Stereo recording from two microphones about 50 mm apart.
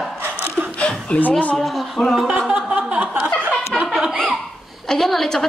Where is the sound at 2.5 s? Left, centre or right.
Centre.